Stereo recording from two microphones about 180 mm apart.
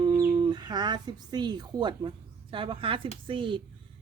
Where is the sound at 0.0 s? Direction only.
20° right (ahead or behind).